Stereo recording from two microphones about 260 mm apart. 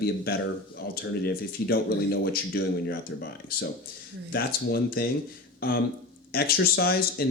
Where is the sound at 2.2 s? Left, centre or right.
Left.